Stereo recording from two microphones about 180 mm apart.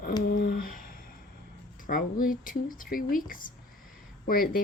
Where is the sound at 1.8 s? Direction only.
50° left (ahead or behind).